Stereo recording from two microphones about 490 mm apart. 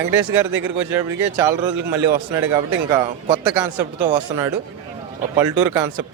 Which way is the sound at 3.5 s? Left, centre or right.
Right.